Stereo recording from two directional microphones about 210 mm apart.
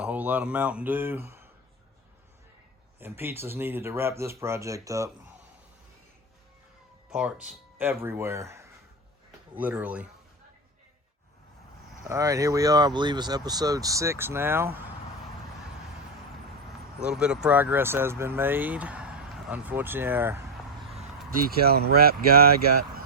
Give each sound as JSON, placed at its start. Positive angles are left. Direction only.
{"t": 0.0, "sound": "speech", "side_deg": -5}
{"t": 3.0, "sound": "speech", "side_deg": -10}
{"t": 7.1, "sound": "speech", "side_deg": -5}
{"t": 12.0, "sound": "speech", "side_deg": -15}
{"t": 17.0, "sound": "speech", "side_deg": -5}
{"t": 21.6, "sound": "speech", "side_deg": -50}